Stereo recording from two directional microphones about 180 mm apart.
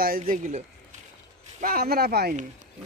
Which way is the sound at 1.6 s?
55° right (ahead or behind).